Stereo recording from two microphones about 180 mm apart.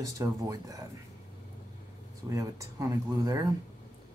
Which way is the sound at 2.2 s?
15° right (ahead or behind).